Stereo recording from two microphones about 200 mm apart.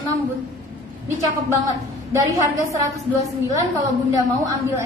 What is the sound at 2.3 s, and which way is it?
A woman's voice, 15° right (ahead or behind).